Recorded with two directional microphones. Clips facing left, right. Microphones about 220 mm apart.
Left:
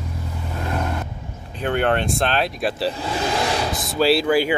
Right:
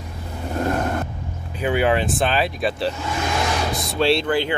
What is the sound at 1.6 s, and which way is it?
Speech, 5° right (ahead or behind).